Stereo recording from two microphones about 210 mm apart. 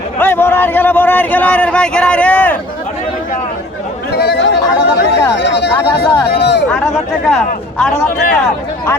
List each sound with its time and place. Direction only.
0.2 s speech: 10° left (ahead or behind)
4.2 s chatter: 55° left (ahead or behind)
5.4 s speech: 55° left (ahead or behind)
6.0 s a sound: 50° left (ahead or behind)
7.3 s speech: 5° left (ahead or behind)